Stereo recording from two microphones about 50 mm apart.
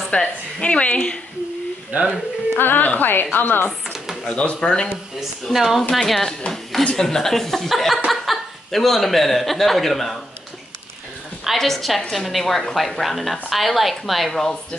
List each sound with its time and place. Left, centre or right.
0.1 s a woman's voice: left
1.9 s speech: right
2.5 s speech: left
3.9 s a sound: centre
4.3 s a woman's voice: centre
5.4 s a woman's voice: centre
5.8 s a woman's voice: centre
6.8 s a woman's voice: centre
11.5 s a woman's voice: centre